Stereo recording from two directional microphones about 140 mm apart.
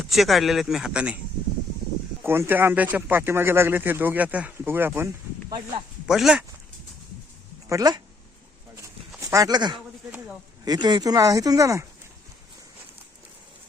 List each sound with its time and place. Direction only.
0.0 s speech: centre (ahead or behind)
2.2 s speech: 15° right (ahead or behind)
5.5 s speech: 35° right (ahead or behind)
6.1 s speech: 5° right (ahead or behind)
7.7 s speech: 25° right (ahead or behind)
9.2 s speech: 25° right (ahead or behind)